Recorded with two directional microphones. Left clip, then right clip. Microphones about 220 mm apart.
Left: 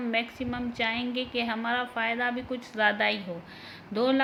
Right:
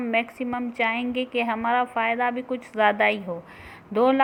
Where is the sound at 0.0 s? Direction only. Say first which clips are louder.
Right 5 dB; 15° right (ahead or behind).